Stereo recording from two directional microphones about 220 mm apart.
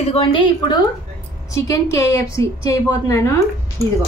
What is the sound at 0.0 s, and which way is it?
A woman's voice, 25° left (ahead or behind).